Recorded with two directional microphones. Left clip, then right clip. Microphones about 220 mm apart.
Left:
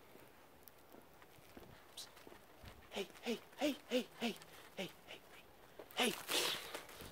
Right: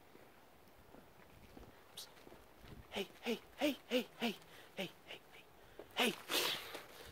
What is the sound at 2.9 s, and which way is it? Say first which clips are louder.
Hoot: right 2 dB; 30° right (ahead or behind).